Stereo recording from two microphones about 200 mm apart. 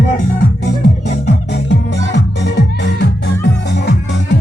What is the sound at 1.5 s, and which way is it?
Music, 60° left (ahead or behind).